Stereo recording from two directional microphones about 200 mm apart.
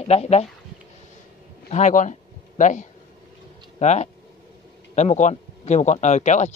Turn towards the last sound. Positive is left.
turn(degrees=35)  # may be behind; listen again after turning